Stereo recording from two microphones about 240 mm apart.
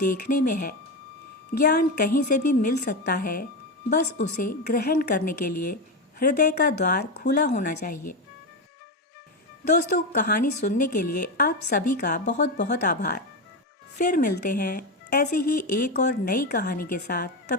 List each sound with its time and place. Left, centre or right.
0.1 s speech: left
10.1 s speech: left
12.2 s speech: left